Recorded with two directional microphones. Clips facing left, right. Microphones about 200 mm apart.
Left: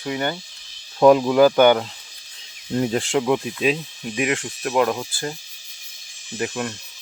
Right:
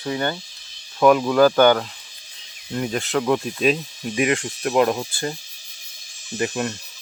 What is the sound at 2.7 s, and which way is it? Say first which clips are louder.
Speech: left 3 dB; 30° left (ahead or behind).